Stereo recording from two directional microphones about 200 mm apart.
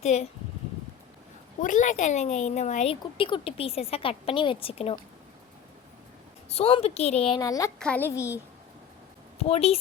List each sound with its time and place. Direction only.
0.0 s speech: 35° left (ahead or behind)
1.6 s speech: 40° left (ahead or behind)
6.5 s speech: 30° left (ahead or behind)
7.3 s a child's voice: 15° left (ahead or behind)
7.8 s a child's voice: 5° left (ahead or behind)
9.4 s speech: 30° left (ahead or behind)